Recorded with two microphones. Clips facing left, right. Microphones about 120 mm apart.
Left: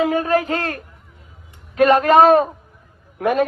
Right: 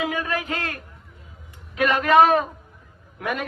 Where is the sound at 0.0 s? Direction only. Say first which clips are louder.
Left 9 dB; 40° left (ahead or behind).